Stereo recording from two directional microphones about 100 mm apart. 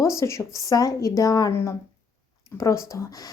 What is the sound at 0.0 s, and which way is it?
A child's voice, 30° left (ahead or behind).